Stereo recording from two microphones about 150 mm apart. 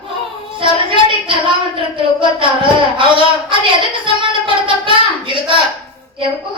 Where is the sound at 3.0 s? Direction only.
35° right (ahead or behind).